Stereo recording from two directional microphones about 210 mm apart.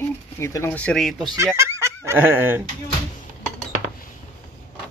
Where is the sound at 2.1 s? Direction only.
10° right (ahead or behind).